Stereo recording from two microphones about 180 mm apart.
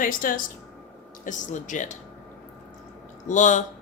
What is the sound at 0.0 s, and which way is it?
Speech, 50° left (ahead or behind).